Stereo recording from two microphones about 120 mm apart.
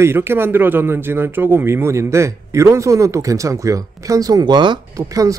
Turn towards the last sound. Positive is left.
turn(degrees=-40)  # may be behind; listen again after turning